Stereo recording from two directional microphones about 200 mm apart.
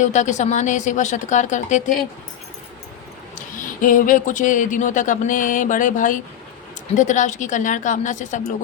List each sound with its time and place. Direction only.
0.0 s speech: 35° left (ahead or behind)
3.3 s speech: 40° left (ahead or behind)